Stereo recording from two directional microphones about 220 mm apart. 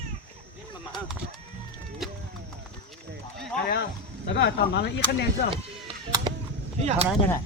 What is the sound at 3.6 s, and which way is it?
Speech, 50° left (ahead or behind).